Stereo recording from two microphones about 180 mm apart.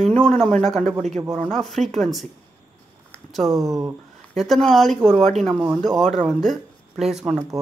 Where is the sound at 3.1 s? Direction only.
Centre (ahead or behind).